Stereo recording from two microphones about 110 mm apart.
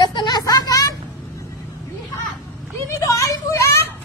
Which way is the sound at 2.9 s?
25° left (ahead or behind).